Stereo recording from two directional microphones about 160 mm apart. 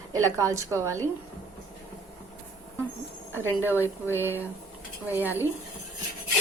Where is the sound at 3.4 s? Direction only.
15° right (ahead or behind).